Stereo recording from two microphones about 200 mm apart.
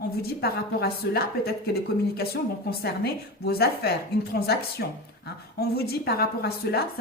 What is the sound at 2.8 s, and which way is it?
A woman's voice, 55° left (ahead or behind).